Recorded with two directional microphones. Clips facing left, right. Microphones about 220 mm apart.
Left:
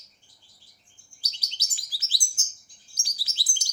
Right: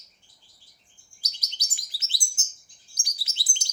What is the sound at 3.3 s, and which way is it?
Chirp, 25° right (ahead or behind).